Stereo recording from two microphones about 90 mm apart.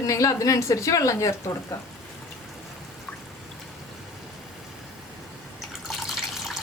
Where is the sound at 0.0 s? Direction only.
40° left (ahead or behind).